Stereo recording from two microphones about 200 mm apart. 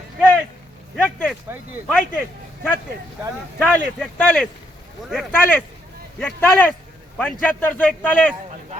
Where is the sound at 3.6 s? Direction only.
5° left (ahead or behind).